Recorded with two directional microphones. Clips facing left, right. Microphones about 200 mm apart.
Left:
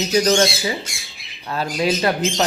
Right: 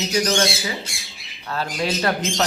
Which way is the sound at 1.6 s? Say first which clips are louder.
Left 4 dB; 15° left (ahead or behind).